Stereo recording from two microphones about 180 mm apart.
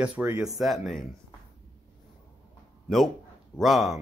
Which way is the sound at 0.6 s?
Centre (ahead or behind).